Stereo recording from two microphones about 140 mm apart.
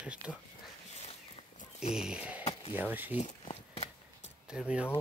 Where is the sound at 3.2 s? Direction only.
55° left (ahead or behind).